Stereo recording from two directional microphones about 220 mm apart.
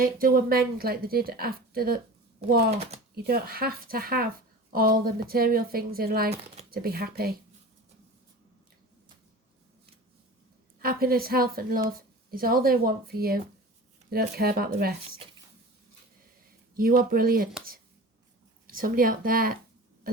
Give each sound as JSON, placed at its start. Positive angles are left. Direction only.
{"t": 0.0, "sound": "speech", "side_deg": -40}
{"t": 3.2, "sound": "speech", "side_deg": -45}
{"t": 10.8, "sound": "speech", "side_deg": -45}
{"t": 16.7, "sound": "speech", "side_deg": -40}
{"t": 18.7, "sound": "speech", "side_deg": -40}